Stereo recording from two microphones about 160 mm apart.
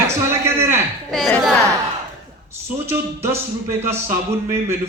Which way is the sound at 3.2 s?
15° right (ahead or behind).